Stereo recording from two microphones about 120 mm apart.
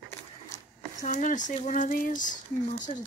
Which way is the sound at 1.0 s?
90° left.